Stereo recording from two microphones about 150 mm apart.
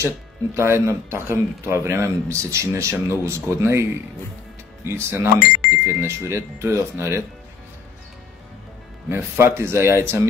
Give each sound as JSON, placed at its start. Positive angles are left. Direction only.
{"t": 0.6, "sound": "speech", "side_deg": -15}
{"t": 9.1, "sound": "speech", "side_deg": -15}